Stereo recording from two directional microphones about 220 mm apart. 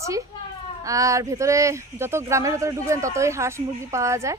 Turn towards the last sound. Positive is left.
turn(degrees=-15)  # may be behind; listen again after turning